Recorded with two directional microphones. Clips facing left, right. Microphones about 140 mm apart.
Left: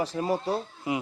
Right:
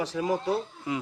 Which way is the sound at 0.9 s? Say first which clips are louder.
Left 3 dB; 15° left (ahead or behind).